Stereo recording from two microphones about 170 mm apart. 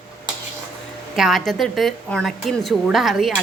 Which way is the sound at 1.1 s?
Centre (ahead or behind).